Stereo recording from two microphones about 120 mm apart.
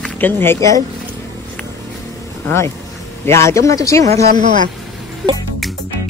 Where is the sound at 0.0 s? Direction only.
15° left (ahead or behind).